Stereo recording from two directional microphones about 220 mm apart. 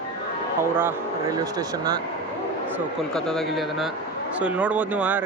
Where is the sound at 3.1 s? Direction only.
Centre (ahead or behind).